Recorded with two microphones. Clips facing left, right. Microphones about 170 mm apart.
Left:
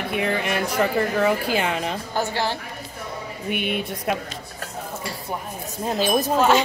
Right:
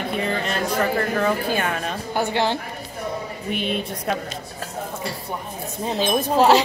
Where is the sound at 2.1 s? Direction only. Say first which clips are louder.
Right 4 dB; 20° right (ahead or behind).